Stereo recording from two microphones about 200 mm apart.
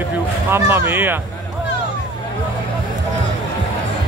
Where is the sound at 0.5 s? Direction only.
10° right (ahead or behind).